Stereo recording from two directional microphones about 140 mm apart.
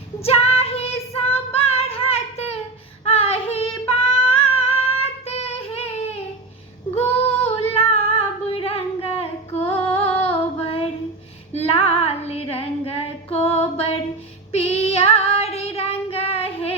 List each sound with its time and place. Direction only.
0.2 s child singing: 45° left (ahead or behind)
6.9 s female singing: 45° left (ahead or behind)
8.4 s a sound: 45° left (ahead or behind)
9.7 s music: 50° left (ahead or behind)
11.5 s female singing: 45° left (ahead or behind)